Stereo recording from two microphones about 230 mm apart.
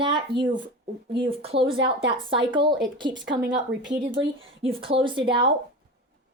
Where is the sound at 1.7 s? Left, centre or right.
Right.